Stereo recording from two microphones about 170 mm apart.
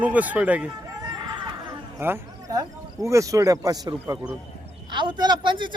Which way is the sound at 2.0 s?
15° right (ahead or behind).